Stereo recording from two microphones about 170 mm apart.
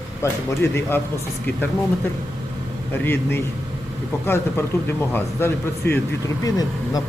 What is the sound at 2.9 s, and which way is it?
A man's voice, 10° left (ahead or behind).